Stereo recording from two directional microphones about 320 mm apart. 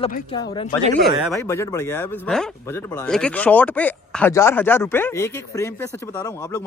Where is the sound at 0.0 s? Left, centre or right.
Centre.